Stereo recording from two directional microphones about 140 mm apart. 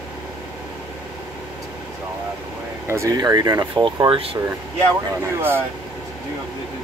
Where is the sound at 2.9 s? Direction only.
25° right (ahead or behind).